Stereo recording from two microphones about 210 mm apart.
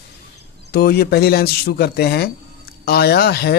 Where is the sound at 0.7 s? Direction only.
50° left (ahead or behind).